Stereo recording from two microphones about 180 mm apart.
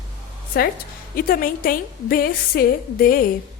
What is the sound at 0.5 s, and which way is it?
A woman's voice, 60° left (ahead or behind).